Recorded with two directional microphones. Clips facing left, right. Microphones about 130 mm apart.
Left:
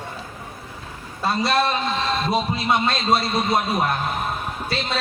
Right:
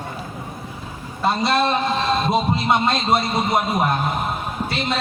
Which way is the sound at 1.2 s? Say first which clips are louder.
Right 2 dB; 20° right (ahead or behind).